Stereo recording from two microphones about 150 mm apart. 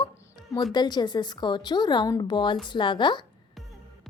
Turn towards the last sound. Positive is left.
turn(degrees=30)  # may be behind; listen again after turning